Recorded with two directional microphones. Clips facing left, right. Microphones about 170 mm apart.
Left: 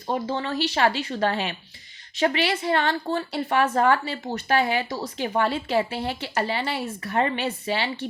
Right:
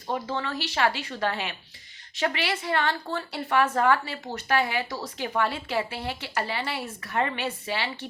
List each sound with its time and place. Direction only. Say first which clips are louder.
0.1 s a woman's voice: left 3 dB; 25° left (ahead or behind)